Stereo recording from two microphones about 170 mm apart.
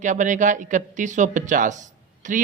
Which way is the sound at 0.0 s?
45° right (ahead or behind).